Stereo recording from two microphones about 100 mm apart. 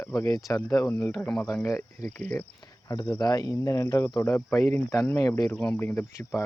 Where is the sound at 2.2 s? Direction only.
20° left (ahead or behind).